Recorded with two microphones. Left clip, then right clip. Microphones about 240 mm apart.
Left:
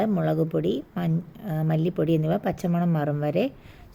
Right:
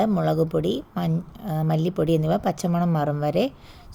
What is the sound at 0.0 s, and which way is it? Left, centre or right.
Speech, centre.